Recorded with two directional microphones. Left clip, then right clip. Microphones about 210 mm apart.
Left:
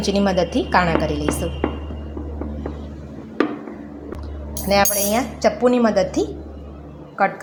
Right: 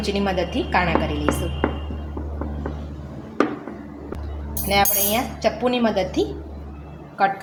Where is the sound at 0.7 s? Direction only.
30° left (ahead or behind).